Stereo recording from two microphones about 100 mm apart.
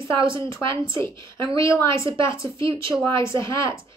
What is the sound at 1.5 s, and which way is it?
Speech, 30° left (ahead or behind).